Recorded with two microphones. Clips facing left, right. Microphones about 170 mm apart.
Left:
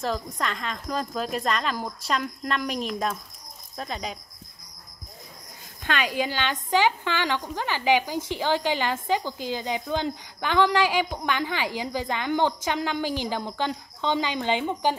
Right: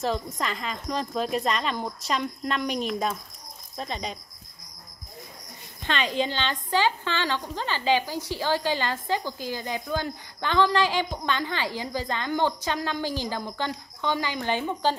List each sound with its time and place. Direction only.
0.0 s speech: centre (ahead or behind)
5.9 s a woman's voice: 10° left (ahead or behind)